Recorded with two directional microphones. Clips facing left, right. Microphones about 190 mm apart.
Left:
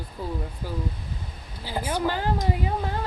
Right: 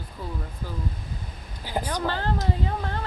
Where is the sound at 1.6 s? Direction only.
15° right (ahead or behind).